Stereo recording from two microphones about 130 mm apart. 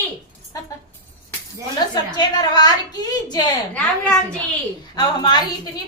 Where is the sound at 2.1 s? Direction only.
30° left (ahead or behind).